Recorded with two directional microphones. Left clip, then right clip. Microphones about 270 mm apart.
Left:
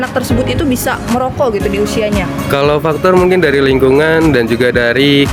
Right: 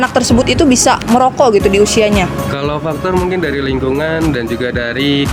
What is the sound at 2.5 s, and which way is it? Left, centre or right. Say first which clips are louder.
Speech: left 6 dB; left.